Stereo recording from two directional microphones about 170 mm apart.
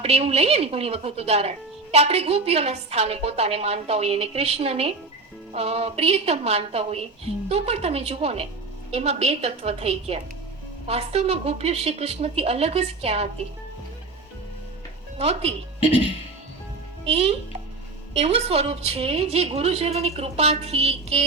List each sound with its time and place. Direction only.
0.0 s speech: 35° right (ahead or behind)
15.2 s speech: 35° right (ahead or behind)
18.1 s speech: 35° right (ahead or behind)